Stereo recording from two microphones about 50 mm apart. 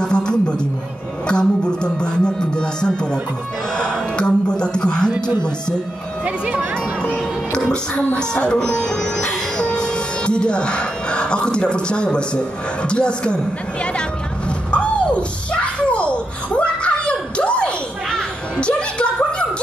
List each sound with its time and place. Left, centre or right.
0.0 s music: centre
1.2 s speech: centre
6.2 s speech: right
7.0 s speech: centre
8.2 s music: centre
12.8 s speech: left
14.7 s a sound: left